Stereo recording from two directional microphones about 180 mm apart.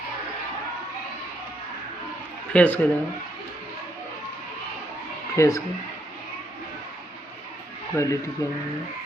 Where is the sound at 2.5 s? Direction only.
10° left (ahead or behind).